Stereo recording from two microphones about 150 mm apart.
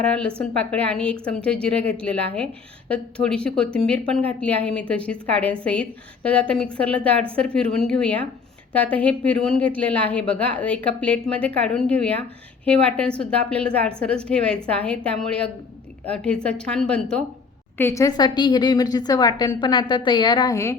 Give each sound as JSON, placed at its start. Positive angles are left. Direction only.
{"t": 0.0, "sound": "a woman's voice", "side_deg": 10}
{"t": 17.7, "sound": "a woman's voice", "side_deg": 20}